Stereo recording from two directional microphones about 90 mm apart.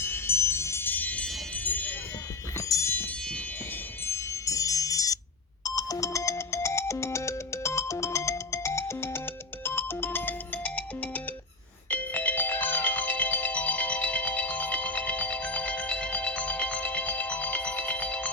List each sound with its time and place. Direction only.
0.0 s music: 25° left (ahead or behind)
1.5 s jingle bell: 20° left (ahead or behind)
2.6 s wind chime: 35° left (ahead or behind)
4.0 s music: 30° left (ahead or behind)
5.6 s ringtone: 40° left (ahead or behind); by 11.2 s 15° left (ahead or behind)
11.9 s music: 15° left (ahead or behind)